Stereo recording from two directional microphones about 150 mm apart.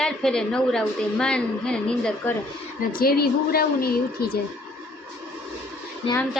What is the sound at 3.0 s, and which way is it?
A woman's voice, 90° left.